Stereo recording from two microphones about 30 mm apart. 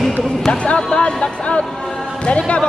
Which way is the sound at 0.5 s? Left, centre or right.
Left.